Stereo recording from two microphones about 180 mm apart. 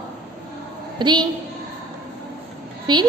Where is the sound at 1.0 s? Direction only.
25° right (ahead or behind).